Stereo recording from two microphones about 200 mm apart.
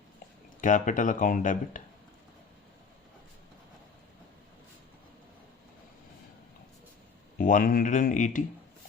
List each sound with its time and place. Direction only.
0.6 s speech: 40° left (ahead or behind)
7.3 s speech: 40° left (ahead or behind)